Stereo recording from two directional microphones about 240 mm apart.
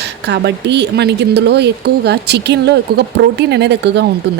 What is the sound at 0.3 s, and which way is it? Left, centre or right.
A woman's voice, right.